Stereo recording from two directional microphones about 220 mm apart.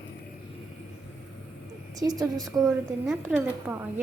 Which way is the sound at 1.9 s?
15° right (ahead or behind).